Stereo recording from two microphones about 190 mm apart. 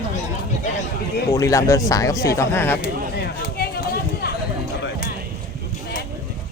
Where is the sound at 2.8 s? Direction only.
55° left (ahead or behind).